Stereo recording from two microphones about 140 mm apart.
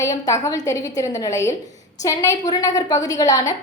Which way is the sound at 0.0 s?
25° left (ahead or behind).